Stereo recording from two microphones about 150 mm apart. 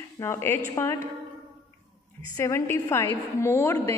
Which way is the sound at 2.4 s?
15° left (ahead or behind).